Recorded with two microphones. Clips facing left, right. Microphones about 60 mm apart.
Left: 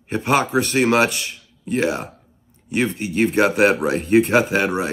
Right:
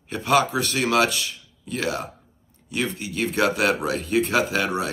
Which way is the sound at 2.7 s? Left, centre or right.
Left.